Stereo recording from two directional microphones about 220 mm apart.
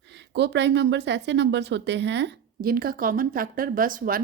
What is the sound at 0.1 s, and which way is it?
Speech, 50° right (ahead or behind).